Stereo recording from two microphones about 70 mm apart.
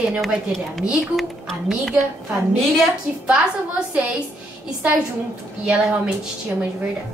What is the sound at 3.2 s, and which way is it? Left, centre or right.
Speech, centre.